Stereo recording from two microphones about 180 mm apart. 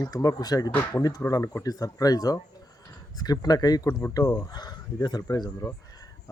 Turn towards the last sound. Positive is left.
turn(degrees=20)  # may be behind; listen again after turning